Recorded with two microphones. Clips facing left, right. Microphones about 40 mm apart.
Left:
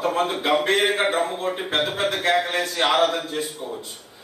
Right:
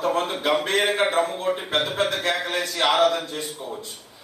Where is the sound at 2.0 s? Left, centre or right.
Centre.